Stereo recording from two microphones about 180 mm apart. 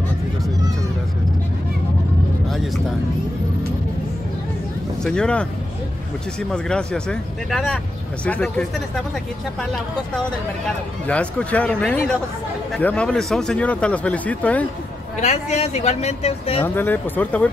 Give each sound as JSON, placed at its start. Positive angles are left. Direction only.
{"t": 5.0, "sound": "speech", "side_deg": 5}
{"t": 6.5, "sound": "speech", "side_deg": 5}
{"t": 11.1, "sound": "speech", "side_deg": 5}
{"t": 15.1, "sound": "speech", "side_deg": 40}
{"t": 16.6, "sound": "speech", "side_deg": 10}